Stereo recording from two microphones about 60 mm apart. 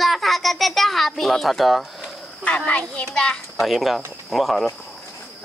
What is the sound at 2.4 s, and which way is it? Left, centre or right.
Speech, left.